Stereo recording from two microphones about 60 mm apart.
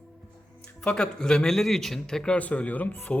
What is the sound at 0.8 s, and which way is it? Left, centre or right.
A man's voice, centre.